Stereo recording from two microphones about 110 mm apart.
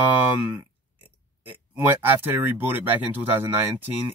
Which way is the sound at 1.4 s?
20° right (ahead or behind).